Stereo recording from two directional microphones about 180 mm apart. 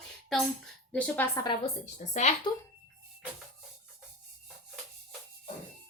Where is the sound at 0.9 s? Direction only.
10° left (ahead or behind).